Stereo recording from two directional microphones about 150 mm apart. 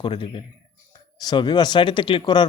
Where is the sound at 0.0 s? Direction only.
35° left (ahead or behind).